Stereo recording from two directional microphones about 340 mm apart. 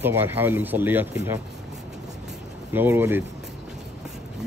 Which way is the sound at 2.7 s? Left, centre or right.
Centre.